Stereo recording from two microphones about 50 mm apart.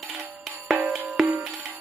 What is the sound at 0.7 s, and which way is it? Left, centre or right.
Music, centre.